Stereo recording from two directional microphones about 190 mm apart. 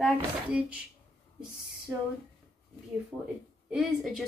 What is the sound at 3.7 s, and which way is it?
Speech, centre (ahead or behind).